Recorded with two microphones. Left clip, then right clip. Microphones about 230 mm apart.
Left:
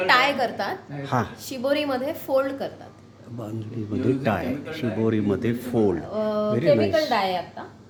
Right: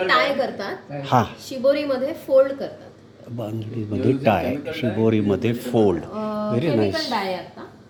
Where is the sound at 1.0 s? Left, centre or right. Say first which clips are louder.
Right 7 dB; centre.